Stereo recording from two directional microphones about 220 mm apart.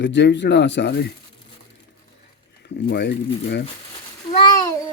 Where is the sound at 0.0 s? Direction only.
55° left (ahead or behind).